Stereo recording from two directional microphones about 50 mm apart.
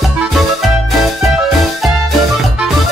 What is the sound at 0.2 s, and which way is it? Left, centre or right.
Music, centre.